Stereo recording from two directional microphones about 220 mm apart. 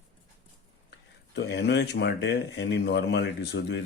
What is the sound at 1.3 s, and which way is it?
Speech, 50° left (ahead or behind).